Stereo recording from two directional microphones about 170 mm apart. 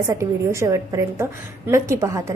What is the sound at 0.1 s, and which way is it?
A woman's voice, 15° right (ahead or behind).